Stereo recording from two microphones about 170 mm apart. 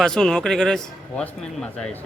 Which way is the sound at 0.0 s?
5° left (ahead or behind).